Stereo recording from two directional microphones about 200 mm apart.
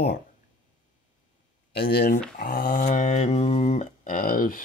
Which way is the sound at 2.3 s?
50° left (ahead or behind).